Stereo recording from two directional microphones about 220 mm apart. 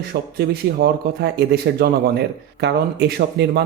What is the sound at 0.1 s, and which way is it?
Speech, 45° right (ahead or behind).